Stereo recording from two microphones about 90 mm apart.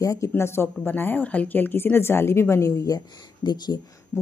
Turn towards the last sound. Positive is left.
turn(degrees=50)  # may be behind; listen again after turning